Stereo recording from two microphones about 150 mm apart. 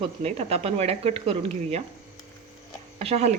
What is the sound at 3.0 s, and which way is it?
Speech, 45° right (ahead or behind).